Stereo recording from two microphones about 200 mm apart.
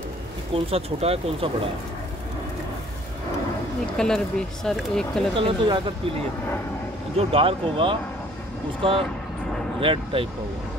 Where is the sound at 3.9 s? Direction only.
5° left (ahead or behind).